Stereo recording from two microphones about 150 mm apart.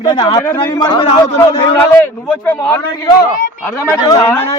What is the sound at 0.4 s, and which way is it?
Speech, 15° left (ahead or behind).